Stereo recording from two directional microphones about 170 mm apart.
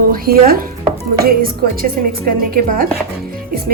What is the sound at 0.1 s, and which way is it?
A woman's voice, 60° right (ahead or behind).